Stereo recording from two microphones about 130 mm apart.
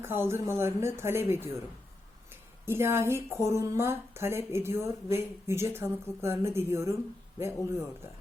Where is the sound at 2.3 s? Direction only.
20° right (ahead or behind).